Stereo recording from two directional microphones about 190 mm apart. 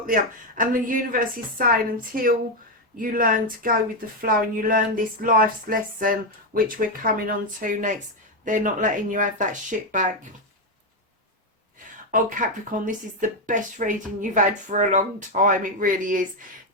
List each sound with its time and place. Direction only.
0.0 s speech: 45° right (ahead or behind)
12.1 s speech: 45° right (ahead or behind)